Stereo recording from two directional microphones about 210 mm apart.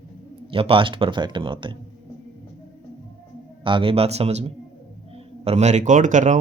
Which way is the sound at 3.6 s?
25° right (ahead or behind).